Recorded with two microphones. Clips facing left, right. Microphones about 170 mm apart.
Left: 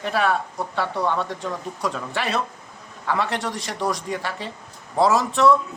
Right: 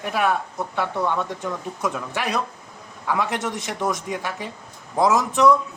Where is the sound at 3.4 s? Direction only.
20° right (ahead or behind).